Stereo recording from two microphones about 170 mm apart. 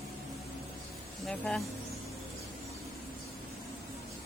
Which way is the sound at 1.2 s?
Centre (ahead or behind).